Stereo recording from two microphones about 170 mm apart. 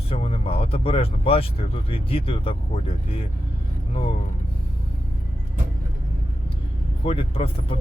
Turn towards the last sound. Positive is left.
turn(degrees=35)  # may be behind; listen again after turning